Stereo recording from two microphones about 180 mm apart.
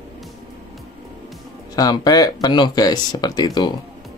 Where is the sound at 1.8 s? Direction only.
20° left (ahead or behind).